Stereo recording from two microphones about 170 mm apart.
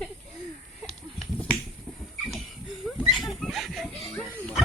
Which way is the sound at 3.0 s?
Centre (ahead or behind).